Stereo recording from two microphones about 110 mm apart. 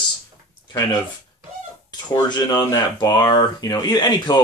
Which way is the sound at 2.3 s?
35° left (ahead or behind).